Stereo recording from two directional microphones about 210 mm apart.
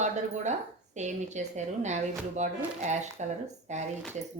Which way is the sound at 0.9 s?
35° right (ahead or behind).